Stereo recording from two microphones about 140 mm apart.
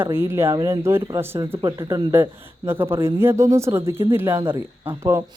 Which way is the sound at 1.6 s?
30° right (ahead or behind).